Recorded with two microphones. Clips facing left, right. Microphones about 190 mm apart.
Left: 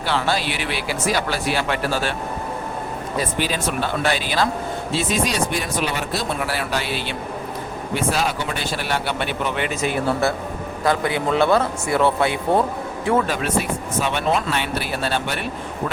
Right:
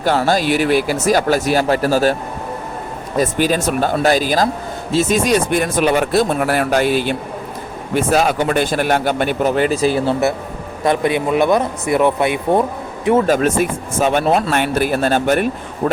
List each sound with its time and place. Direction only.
0.0 s speech: 45° right (ahead or behind)
3.2 s speech: 45° right (ahead or behind)
10.8 s speech: 20° right (ahead or behind)
13.2 s speech: 45° right (ahead or behind)